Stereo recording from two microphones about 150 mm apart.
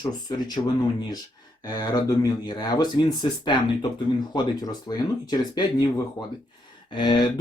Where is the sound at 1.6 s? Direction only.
25° left (ahead or behind).